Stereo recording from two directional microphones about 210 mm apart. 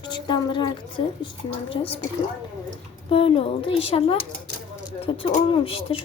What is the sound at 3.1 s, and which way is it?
A woman's voice, 25° left (ahead or behind).